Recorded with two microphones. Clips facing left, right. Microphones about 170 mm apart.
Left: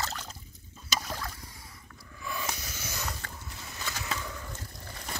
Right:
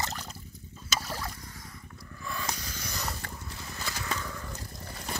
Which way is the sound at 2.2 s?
10° left (ahead or behind).